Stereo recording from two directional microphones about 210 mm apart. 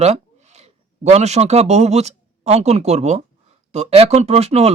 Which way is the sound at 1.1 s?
30° right (ahead or behind).